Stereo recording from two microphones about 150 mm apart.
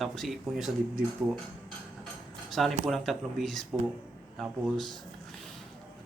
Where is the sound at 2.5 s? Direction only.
Centre (ahead or behind).